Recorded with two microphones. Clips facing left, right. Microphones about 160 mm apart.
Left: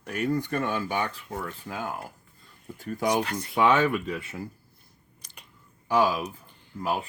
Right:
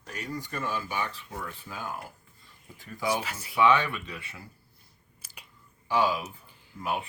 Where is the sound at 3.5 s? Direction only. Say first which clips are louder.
Left 2 dB; 45° left (ahead or behind).